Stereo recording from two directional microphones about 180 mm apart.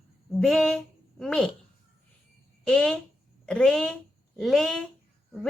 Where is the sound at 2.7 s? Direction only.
5° left (ahead or behind).